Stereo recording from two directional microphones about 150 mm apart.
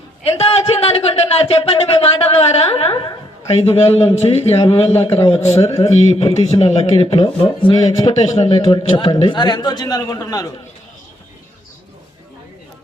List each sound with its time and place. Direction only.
0.3 s a man's voice: 45° left (ahead or behind)
3.5 s a man's voice: 40° left (ahead or behind)
5.5 s a man's voice: 20° left (ahead or behind)
5.9 s a man's voice: 45° left (ahead or behind)
7.7 s a man's voice: 25° left (ahead or behind)
8.2 s a man's voice: 50° left (ahead or behind)
8.4 s a man's voice: 30° left (ahead or behind)